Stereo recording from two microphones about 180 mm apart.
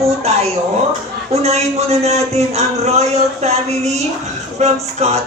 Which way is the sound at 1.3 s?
35° right (ahead or behind).